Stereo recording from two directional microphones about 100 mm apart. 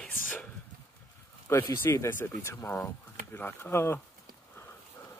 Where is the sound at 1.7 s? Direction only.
25° left (ahead or behind).